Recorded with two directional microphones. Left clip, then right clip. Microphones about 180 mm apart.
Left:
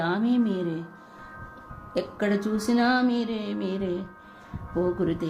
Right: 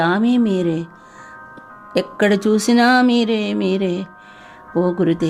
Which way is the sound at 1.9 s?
45° right (ahead or behind).